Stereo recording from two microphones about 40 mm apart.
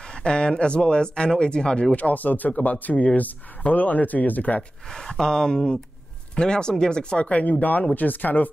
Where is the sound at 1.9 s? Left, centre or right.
Left.